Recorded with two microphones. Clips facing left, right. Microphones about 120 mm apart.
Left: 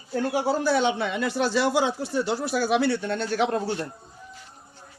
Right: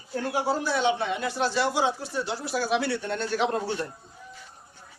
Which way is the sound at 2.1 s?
60° left (ahead or behind).